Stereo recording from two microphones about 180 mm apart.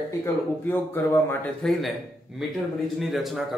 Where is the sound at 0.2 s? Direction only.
10° left (ahead or behind).